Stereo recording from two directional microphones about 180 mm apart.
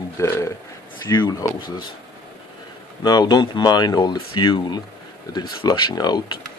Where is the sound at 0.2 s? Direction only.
15° left (ahead or behind).